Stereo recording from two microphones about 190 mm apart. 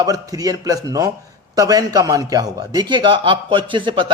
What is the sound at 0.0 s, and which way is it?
A man's voice, 20° right (ahead or behind).